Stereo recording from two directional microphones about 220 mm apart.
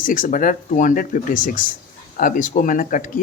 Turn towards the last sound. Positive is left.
turn(degrees=35)  # may be behind; listen again after turning